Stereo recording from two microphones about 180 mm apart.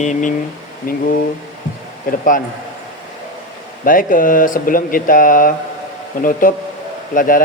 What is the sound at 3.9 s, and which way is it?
Speech, 50° left (ahead or behind).